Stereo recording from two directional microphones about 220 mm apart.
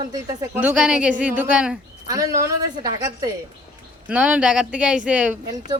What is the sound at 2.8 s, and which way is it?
Speech, 15° right (ahead or behind).